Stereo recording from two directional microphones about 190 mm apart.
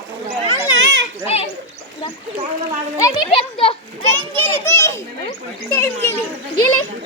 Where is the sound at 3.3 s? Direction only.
30° left (ahead or behind).